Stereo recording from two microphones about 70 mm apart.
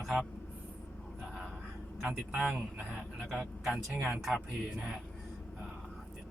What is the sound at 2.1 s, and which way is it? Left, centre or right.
Speech, right.